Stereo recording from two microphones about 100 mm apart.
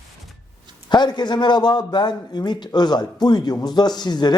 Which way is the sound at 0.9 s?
45° left (ahead or behind).